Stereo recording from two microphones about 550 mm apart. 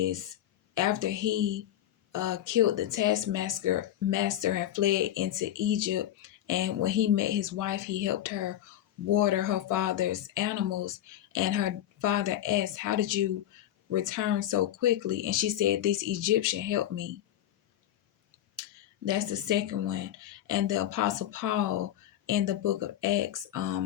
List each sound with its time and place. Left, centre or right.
0.0 s speech: right
18.6 s a sound: right
19.0 s speech: right